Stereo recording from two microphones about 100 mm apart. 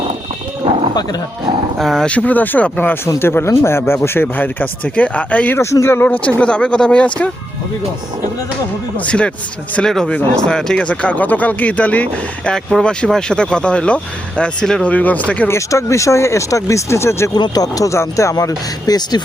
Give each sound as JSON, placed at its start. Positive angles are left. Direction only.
{"t": 1.8, "sound": "speech", "side_deg": 0}
{"t": 2.0, "sound": "speech", "side_deg": 15}
{"t": 5.5, "sound": "speech", "side_deg": 25}
{"t": 9.0, "sound": "speech", "side_deg": 10}
{"t": 15.4, "sound": "speech", "side_deg": 30}
{"t": 17.3, "sound": "speech", "side_deg": 40}